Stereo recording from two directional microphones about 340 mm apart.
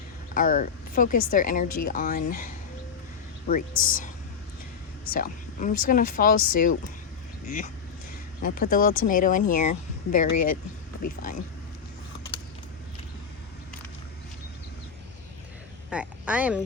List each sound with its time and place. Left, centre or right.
0.3 s a woman's voice: left
5.1 s speech: left
10.3 s speech: left
11.0 s speech: left
15.9 s speech: centre